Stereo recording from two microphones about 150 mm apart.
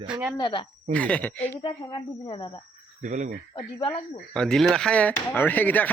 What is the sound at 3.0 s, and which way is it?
Speech, 55° right (ahead or behind).